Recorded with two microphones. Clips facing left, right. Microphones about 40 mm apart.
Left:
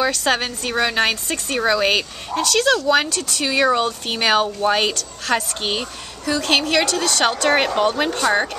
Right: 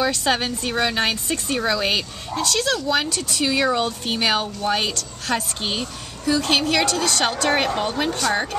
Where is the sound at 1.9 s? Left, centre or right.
Left.